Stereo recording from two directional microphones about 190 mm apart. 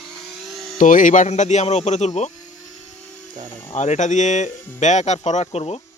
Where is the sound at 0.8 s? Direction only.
45° left (ahead or behind).